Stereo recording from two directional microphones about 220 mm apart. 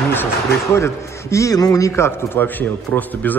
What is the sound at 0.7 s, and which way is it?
A man's voice, 15° left (ahead or behind).